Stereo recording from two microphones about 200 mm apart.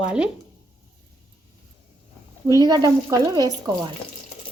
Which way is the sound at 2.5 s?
20° right (ahead or behind).